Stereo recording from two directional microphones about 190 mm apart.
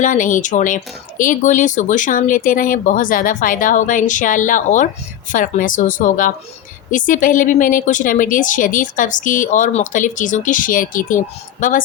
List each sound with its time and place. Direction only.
0.0 s speech: 45° left (ahead or behind)